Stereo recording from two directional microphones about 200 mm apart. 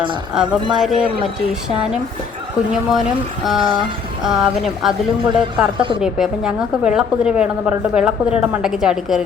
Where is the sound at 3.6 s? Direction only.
25° right (ahead or behind).